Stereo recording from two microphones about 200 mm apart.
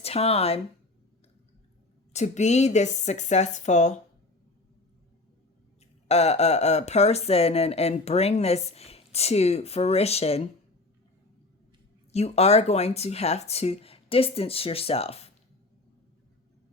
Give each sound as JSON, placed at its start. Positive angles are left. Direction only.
{"t": 0.0, "sound": "speech", "side_deg": 30}
{"t": 2.1, "sound": "speech", "side_deg": 35}
{"t": 6.1, "sound": "speech", "side_deg": 30}
{"t": 12.1, "sound": "speech", "side_deg": 30}